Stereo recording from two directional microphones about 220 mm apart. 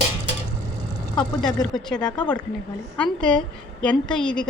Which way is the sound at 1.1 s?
Centre (ahead or behind).